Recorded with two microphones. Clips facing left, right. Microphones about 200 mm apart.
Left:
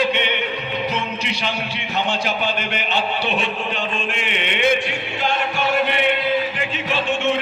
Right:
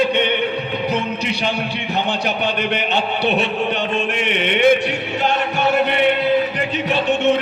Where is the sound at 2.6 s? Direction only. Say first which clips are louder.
Right 4 dB; 60° right (ahead or behind).